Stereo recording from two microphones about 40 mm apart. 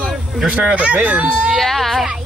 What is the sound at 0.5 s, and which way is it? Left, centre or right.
Speech, right.